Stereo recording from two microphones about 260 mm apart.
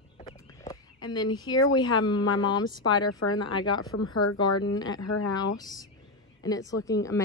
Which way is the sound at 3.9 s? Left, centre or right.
Left.